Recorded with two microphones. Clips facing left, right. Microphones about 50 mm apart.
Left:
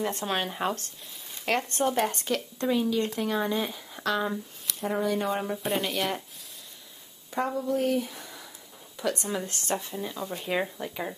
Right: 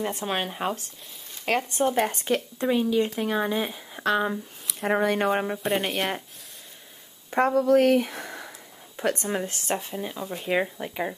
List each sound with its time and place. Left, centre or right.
0.0 s speech: centre
4.7 s speech: right
5.8 s speech: right
7.2 s speech: right
9.8 s speech: right
10.1 s speech: centre